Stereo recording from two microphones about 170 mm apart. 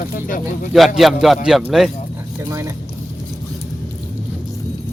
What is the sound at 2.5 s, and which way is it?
Speech, 15° right (ahead or behind).